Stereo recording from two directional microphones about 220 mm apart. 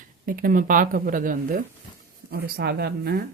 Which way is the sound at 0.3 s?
40° right (ahead or behind).